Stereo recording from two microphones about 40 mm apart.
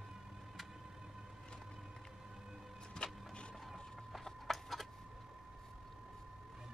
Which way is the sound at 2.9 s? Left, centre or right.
Left.